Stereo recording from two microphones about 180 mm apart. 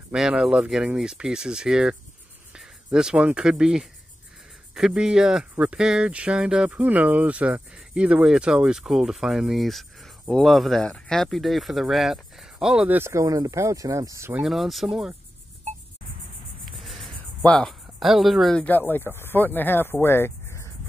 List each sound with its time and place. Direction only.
0.1 s speech: 5° right (ahead or behind)
14.4 s speech: centre (ahead or behind)
16.8 s speech: centre (ahead or behind)